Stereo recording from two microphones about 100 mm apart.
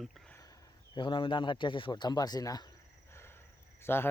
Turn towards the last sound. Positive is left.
turn(degrees=25)  # may be behind; listen again after turning